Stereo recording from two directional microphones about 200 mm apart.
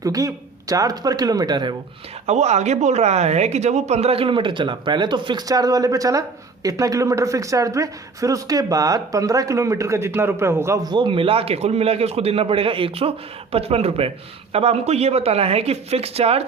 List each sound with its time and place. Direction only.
0.0 s speech: 15° right (ahead or behind)
2.2 s speech: 35° right (ahead or behind)